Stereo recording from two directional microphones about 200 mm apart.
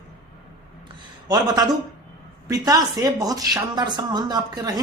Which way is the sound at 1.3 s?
20° right (ahead or behind).